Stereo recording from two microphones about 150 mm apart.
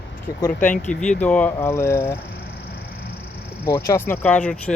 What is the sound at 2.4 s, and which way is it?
Honk, 90° left.